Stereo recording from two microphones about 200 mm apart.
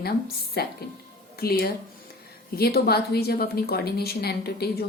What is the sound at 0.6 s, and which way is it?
A woman's voice, 50° left (ahead or behind).